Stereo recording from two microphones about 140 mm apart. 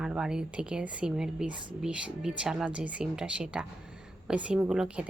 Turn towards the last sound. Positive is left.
turn(degrees=-5)  # may be behind; listen again after turning